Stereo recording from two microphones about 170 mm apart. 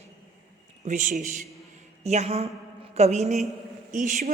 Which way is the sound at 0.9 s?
50° right (ahead or behind).